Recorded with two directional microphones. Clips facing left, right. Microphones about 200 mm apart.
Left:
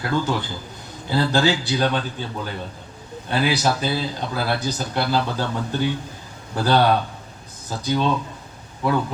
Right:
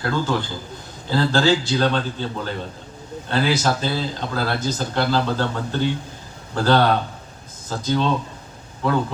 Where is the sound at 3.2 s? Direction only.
15° left (ahead or behind).